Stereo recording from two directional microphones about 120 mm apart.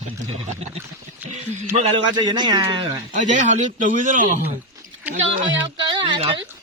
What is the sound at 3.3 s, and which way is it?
A man's voice, 90° right.